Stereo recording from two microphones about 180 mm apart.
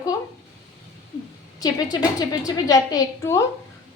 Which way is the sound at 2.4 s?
20° left (ahead or behind).